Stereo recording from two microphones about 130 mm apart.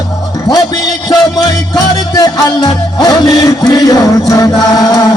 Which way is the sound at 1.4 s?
30° left (ahead or behind).